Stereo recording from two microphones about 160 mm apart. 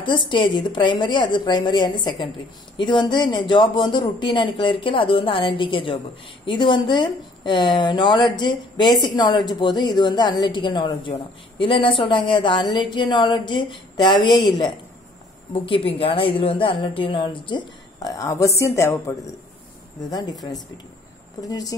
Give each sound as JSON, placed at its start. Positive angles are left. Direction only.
{"t": 0.0, "sound": "a woman's voice", "side_deg": 30}
{"t": 21.4, "sound": "a woman's voice", "side_deg": 25}